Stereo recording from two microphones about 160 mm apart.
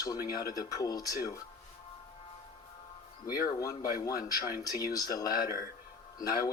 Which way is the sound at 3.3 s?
65° left (ahead or behind).